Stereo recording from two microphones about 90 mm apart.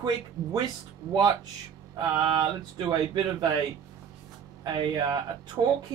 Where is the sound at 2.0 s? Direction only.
65° right (ahead or behind).